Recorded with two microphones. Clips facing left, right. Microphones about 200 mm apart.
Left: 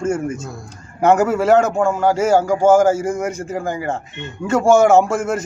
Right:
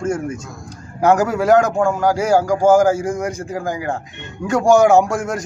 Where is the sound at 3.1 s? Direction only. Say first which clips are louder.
Left 1 dB; 5° left (ahead or behind).